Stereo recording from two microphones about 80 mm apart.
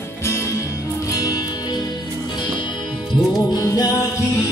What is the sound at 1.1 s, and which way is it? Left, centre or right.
Music, left.